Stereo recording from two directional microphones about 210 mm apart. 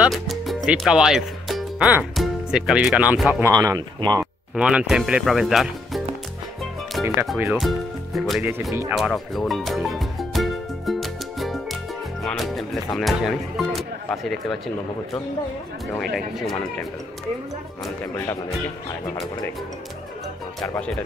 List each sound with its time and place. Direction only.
0.0 s speech: centre (ahead or behind)
3.5 s speech: 15° right (ahead or behind)
4.6 s speech: 5° right (ahead or behind)
7.2 s music: 5° right (ahead or behind)
15.9 s speech: centre (ahead or behind)
20.6 s speech: 5° left (ahead or behind)